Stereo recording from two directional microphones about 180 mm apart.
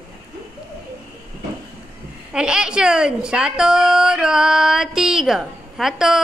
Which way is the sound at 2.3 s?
5° right (ahead or behind).